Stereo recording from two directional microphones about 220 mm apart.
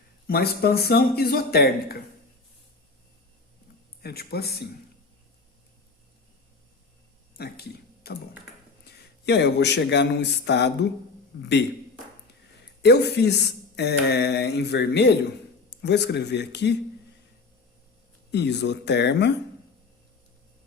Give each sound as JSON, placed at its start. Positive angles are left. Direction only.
{"t": 0.3, "sound": "speech", "side_deg": 45}
{"t": 4.0, "sound": "speech", "side_deg": 45}
{"t": 7.3, "sound": "speech", "side_deg": 45}
{"t": 12.8, "sound": "speech", "side_deg": 50}
{"t": 18.3, "sound": "speech", "side_deg": 50}